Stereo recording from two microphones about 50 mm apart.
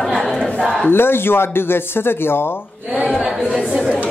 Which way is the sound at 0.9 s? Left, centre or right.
Left.